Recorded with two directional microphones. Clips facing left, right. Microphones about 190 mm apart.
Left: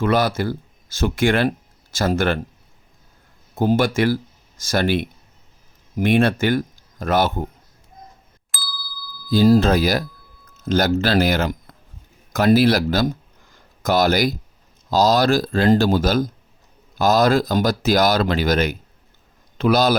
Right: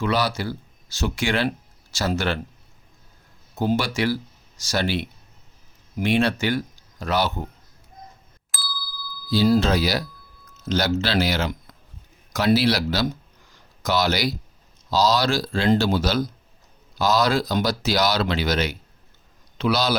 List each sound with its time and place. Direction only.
0.0 s speech: 50° left (ahead or behind)
3.5 s speech: 50° left (ahead or behind)
8.5 s ding: centre (ahead or behind)
9.3 s speech: 50° left (ahead or behind)
13.5 s a sound: 50° left (ahead or behind)
14.8 s a man's voice: 50° left (ahead or behind)